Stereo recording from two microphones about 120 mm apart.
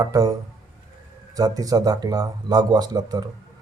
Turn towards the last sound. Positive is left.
turn(degrees=-35)  # may be behind; listen again after turning